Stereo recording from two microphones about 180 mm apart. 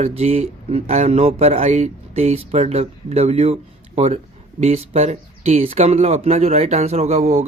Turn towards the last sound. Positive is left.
turn(degrees=-35)  # may be behind; listen again after turning